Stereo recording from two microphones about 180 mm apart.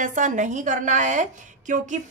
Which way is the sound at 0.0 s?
45° right (ahead or behind).